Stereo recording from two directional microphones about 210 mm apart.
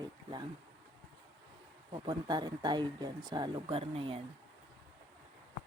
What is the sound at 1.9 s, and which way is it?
Speech, 20° right (ahead or behind).